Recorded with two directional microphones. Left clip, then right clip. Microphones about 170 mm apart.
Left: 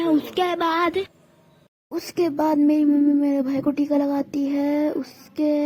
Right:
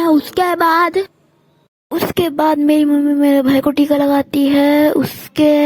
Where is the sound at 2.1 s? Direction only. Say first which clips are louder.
Right 5 dB; 65° right (ahead or behind).